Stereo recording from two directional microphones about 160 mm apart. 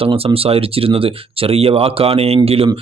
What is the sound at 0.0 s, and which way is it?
Speech, 35° right (ahead or behind).